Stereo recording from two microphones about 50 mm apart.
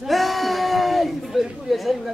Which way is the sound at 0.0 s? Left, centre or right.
Centre.